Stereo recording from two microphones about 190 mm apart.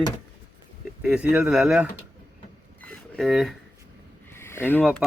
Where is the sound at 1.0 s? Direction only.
5° right (ahead or behind).